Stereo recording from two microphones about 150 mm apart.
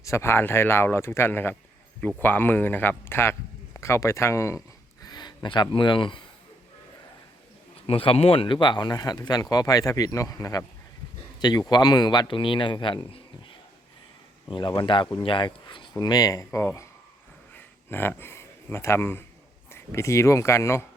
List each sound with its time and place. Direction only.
0.0 s speech: 20° left (ahead or behind)
7.9 s a man's voice: 40° left (ahead or behind)
14.4 s a man's voice: 30° left (ahead or behind)
17.5 s a sound: 15° left (ahead or behind)
19.7 s speech: 20° left (ahead or behind)